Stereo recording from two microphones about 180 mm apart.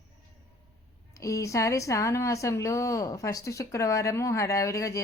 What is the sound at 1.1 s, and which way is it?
Speech, 15° left (ahead or behind).